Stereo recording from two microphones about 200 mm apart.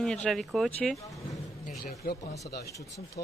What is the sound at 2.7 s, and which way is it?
Speech, 15° left (ahead or behind).